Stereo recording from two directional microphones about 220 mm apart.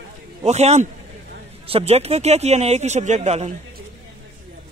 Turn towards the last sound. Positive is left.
turn(degrees=-30)  # may be behind; listen again after turning